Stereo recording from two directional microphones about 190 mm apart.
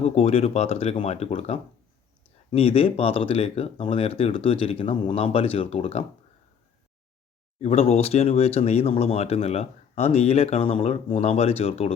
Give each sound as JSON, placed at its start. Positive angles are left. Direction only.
{"t": 0.0, "sound": "speech", "side_deg": 35}
{"t": 7.6, "sound": "speech", "side_deg": 35}